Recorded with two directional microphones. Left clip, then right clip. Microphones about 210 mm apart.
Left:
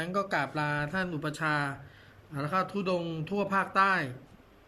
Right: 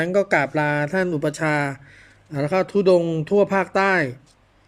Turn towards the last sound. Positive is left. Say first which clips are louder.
# right 7 dB
turn(degrees=-35)  # may be behind; listen again after turning